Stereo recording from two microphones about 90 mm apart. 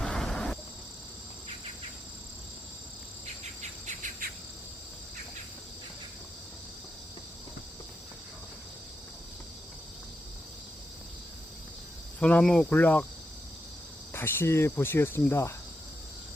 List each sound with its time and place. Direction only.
0.0 s a sound: 5° left (ahead or behind)
12.2 s cricket: 10° left (ahead or behind)
14.1 s speech: 25° left (ahead or behind)